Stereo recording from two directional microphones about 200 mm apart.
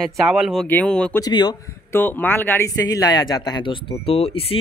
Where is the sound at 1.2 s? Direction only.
20° left (ahead or behind).